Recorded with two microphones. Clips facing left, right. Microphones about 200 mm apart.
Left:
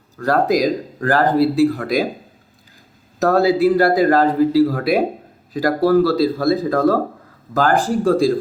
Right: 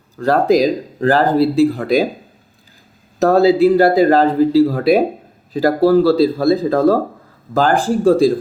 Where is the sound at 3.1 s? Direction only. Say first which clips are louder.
Right 4 dB; 25° right (ahead or behind).